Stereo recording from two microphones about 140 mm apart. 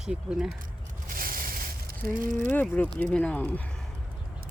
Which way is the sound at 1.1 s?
90° right.